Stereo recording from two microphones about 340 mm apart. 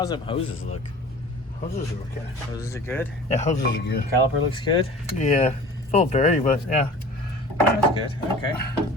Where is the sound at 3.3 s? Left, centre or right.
Left.